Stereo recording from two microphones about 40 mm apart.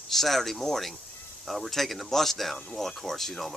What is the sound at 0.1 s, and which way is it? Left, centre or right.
Speech, centre.